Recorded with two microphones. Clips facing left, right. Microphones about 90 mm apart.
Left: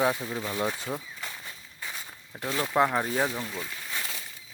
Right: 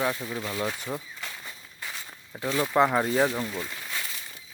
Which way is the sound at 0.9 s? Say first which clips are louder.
Even; 5° left (ahead or behind).